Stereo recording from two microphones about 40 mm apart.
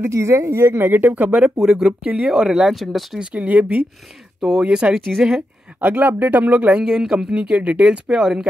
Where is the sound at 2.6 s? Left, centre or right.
Centre.